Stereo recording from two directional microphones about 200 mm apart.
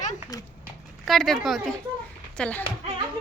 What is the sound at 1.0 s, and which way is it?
A child's voice, centre (ahead or behind).